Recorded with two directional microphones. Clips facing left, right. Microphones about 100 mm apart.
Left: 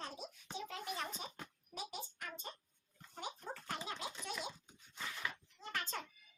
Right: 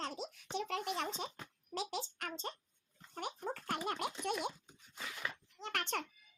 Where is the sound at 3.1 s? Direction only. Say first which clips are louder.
Right 5 dB; 65° right (ahead or behind).